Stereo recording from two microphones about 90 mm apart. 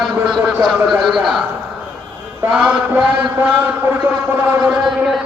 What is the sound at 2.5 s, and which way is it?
Speech, 15° right (ahead or behind).